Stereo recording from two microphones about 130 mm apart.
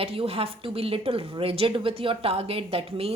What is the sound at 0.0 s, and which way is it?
A woman's voice, 50° right (ahead or behind).